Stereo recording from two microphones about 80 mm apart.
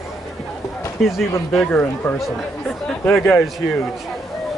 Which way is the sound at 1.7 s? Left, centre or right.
Left.